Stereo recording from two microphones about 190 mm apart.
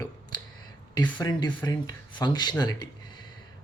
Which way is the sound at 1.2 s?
20° left (ahead or behind).